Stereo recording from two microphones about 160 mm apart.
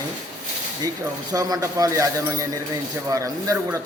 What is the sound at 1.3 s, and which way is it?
A man's voice, 25° right (ahead or behind).